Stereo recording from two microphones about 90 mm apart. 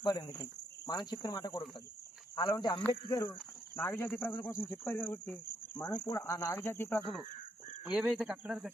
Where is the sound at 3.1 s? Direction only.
35° left (ahead or behind).